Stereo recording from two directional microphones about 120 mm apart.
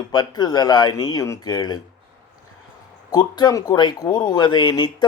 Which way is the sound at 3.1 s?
35° left (ahead or behind).